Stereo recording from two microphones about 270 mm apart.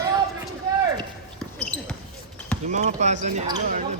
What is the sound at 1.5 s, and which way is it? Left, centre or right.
Basketball bounce, centre.